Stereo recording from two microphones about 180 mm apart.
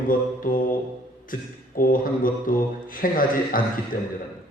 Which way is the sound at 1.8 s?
50° left (ahead or behind).